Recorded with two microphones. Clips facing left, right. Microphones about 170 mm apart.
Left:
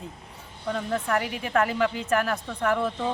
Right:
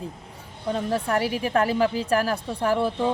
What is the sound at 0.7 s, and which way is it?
Speech, 35° right (ahead or behind).